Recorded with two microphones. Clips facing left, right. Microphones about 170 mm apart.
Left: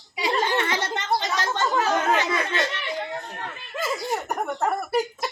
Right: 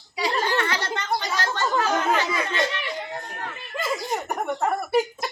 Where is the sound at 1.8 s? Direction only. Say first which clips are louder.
Even; 20° left (ahead or behind).